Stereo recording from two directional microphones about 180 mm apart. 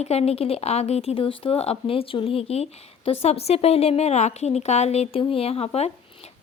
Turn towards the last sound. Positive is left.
turn(degrees=35)  # may be behind; listen again after turning